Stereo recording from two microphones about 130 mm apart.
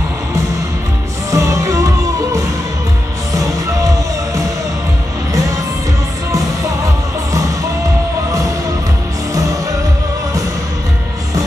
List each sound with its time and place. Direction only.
1.3 s music: 25° right (ahead or behind)
3.3 s music: 25° right (ahead or behind)